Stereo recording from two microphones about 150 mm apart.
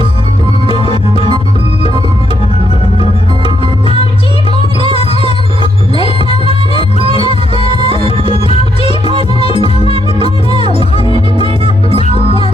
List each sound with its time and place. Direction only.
3.0 s music: 35° right (ahead or behind)
7.5 s music: 40° left (ahead or behind)
9.5 s music: 35° right (ahead or behind)
9.9 s music: 40° left (ahead or behind)
11.3 s music: 35° right (ahead or behind)